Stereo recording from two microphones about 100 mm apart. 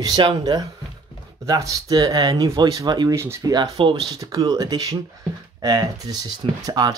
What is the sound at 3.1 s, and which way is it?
Speech, 30° right (ahead or behind).